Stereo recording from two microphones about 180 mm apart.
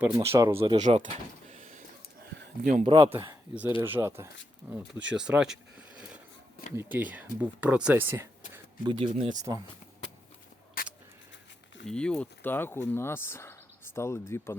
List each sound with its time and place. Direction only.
0.0 s speech: 15° right (ahead or behind)
0.8 s speech: 40° right (ahead or behind)
2.6 s speech: 40° right (ahead or behind)
2.9 s speech: 20° right (ahead or behind); by 5.5 s 5° right (ahead or behind)
6.7 s speech: 10° right (ahead or behind)
8.9 s speech: 30° right (ahead or behind)
9.3 s speech: 20° right (ahead or behind)
11.9 s speech: 5° left (ahead or behind)